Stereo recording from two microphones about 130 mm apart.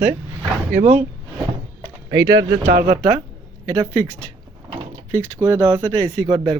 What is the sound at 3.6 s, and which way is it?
Speech, 30° right (ahead or behind).